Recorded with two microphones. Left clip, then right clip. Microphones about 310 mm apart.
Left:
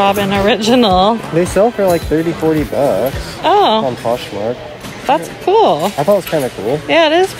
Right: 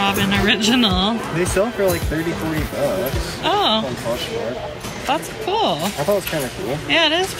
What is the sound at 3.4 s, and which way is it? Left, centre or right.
Speech, centre.